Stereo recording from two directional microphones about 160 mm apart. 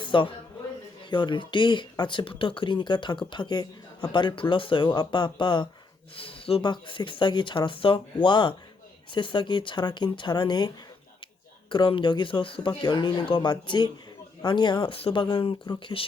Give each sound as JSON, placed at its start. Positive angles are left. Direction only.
{"t": 0.0, "sound": "a sound", "side_deg": 30}
{"t": 1.1, "sound": "speech", "side_deg": 30}
{"t": 11.7, "sound": "speech", "side_deg": 30}